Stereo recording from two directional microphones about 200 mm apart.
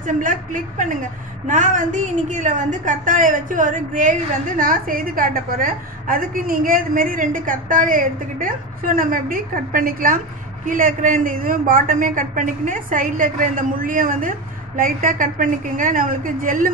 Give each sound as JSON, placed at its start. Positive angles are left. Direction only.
{"t": 0.0, "sound": "a woman's voice", "side_deg": -40}